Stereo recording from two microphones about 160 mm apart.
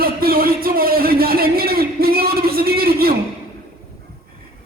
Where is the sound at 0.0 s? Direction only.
65° right (ahead or behind).